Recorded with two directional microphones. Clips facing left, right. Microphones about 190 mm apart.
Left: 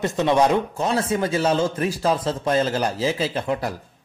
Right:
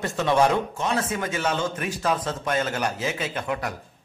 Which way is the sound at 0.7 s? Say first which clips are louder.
Left 4 dB; 35° left (ahead or behind).